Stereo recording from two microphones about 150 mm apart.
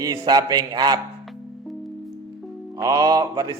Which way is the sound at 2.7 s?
25° right (ahead or behind).